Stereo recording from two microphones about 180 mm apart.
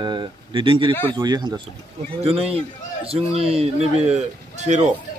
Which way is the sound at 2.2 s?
35° right (ahead or behind).